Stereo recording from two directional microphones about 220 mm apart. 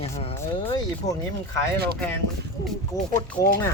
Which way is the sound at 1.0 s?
50° left (ahead or behind).